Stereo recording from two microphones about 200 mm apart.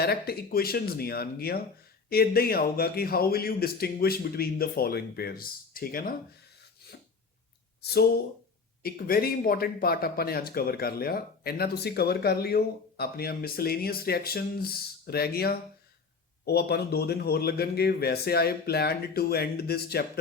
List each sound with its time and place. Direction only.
0.0 s speech: 50° left (ahead or behind)
7.8 s speech: 55° left (ahead or behind)